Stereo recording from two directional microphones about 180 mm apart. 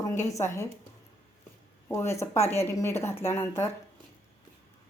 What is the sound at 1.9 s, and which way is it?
A woman's voice, 15° left (ahead or behind).